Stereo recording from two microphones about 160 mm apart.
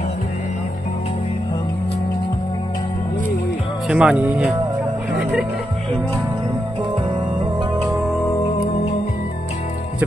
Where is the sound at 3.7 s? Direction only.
Centre (ahead or behind).